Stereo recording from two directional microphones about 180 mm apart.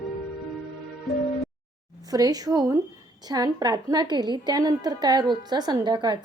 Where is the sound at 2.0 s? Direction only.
20° right (ahead or behind).